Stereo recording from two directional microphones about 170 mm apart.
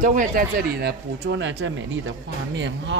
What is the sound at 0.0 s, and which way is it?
Speech, 50° right (ahead or behind).